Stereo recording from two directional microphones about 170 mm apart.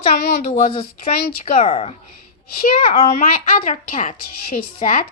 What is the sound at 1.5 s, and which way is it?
A woman's voice, 35° left (ahead or behind).